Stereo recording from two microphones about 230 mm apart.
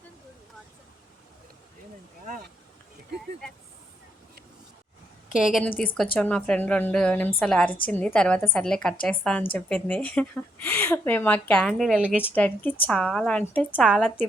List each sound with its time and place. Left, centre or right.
2.2 s a sound: right
5.4 s speech: centre
12.3 s speech: centre